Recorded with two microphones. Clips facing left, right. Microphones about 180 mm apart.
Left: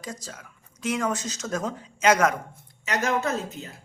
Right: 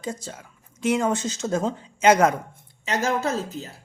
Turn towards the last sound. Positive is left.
turn(degrees=-35)  # may be behind; listen again after turning